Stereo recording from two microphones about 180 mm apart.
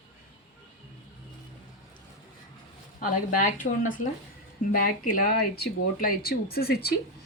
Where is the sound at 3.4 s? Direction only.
45° left (ahead or behind).